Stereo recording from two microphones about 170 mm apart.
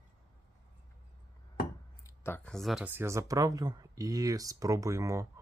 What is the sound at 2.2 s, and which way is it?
Speech, 10° left (ahead or behind).